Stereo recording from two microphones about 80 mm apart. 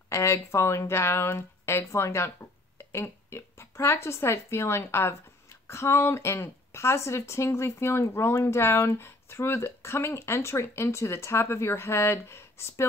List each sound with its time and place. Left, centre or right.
0.1 s speech: left